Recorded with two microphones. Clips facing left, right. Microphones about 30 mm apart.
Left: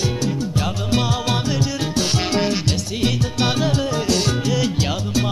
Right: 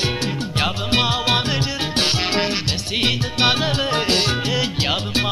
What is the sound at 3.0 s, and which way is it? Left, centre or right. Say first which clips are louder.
Music: right 2 dB; right.